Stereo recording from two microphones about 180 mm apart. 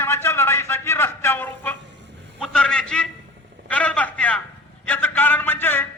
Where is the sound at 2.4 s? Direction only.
5° left (ahead or behind).